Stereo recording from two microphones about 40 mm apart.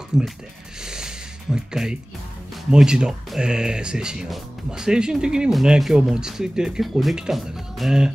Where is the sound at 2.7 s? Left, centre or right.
Centre.